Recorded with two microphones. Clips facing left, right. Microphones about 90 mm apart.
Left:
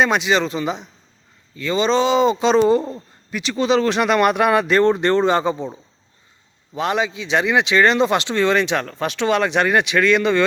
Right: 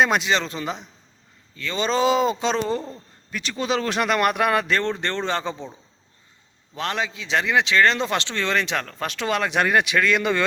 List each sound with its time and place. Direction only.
0.0 s speech: centre (ahead or behind)
1.5 s speech: 15° left (ahead or behind)
1.8 s speech: 5° right (ahead or behind)
6.7 s speech: 5° left (ahead or behind)